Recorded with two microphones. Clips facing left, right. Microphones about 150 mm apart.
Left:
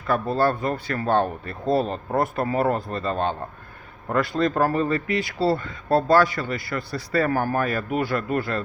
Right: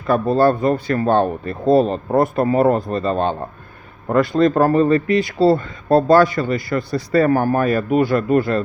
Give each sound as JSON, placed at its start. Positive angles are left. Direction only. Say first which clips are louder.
{"t": 0.1, "sound": "speech", "louder": "right 7 dB", "side_deg": -20}